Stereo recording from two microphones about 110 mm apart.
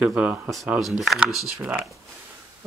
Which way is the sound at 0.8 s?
Centre (ahead or behind).